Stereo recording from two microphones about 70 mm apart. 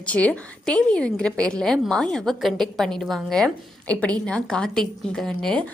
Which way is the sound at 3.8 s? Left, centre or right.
Centre.